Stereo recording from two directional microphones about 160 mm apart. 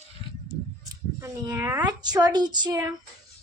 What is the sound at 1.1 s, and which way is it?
Speech, 15° right (ahead or behind).